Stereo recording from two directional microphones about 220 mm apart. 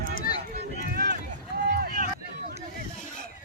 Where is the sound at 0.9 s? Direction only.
40° right (ahead or behind).